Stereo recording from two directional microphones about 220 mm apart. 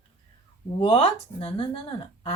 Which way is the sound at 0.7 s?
25° left (ahead or behind).